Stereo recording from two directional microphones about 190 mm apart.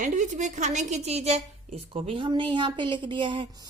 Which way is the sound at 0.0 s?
40° right (ahead or behind).